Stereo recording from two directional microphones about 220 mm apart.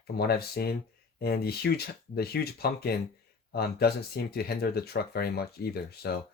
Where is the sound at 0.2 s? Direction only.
45° left (ahead or behind).